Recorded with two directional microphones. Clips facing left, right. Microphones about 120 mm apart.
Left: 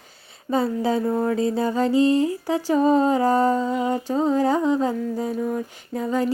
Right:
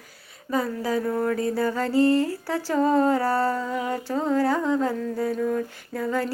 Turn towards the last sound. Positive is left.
turn(degrees=20)  # may be behind; listen again after turning